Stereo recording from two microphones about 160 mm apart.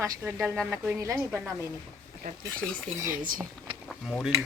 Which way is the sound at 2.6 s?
5° right (ahead or behind).